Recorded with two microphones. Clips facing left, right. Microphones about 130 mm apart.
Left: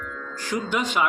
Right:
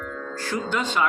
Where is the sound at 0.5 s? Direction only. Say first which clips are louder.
Left 1 dB; 15° left (ahead or behind).